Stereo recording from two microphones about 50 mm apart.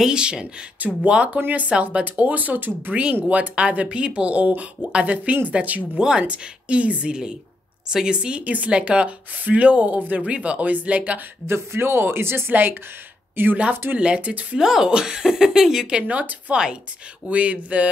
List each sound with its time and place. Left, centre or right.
0.0 s speech: centre
5.9 s speech: centre
11.4 s a woman's voice: right
13.9 s speech: right
14.6 s speech: centre; by 17.8 s right